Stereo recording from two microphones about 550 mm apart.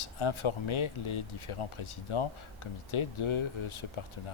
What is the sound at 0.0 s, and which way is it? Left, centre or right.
Speech, left.